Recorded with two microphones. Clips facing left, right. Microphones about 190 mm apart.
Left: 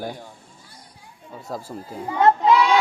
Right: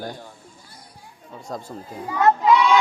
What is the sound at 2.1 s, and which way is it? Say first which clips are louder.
Child singing: left 1 dB; 30° left (ahead or behind).